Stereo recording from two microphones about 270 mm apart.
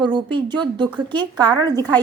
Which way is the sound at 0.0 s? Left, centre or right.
Centre.